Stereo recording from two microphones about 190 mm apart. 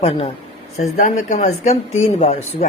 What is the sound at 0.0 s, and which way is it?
Speech, 30° left (ahead or behind).